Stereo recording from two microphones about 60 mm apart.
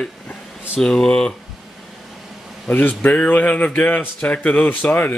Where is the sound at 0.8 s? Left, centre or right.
Centre.